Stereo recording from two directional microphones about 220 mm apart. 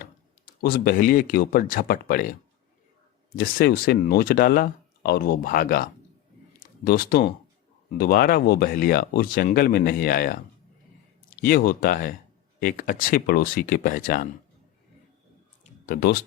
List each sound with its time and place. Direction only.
0.6 s speech: 40° left (ahead or behind)
3.3 s speech: 40° left (ahead or behind)
15.6 s a sound: 40° left (ahead or behind)